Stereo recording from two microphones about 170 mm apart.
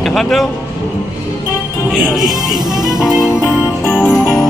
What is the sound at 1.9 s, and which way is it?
Speech, centre (ahead or behind).